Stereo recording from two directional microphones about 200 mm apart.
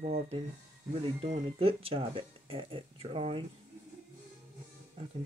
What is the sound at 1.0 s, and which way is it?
Speech, 30° right (ahead or behind).